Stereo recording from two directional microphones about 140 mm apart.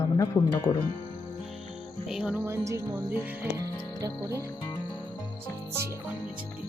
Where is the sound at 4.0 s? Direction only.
25° right (ahead or behind).